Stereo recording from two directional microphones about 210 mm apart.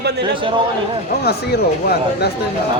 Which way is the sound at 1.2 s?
50° left (ahead or behind).